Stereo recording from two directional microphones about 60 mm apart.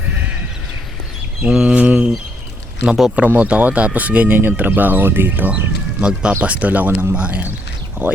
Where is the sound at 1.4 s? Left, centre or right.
Centre.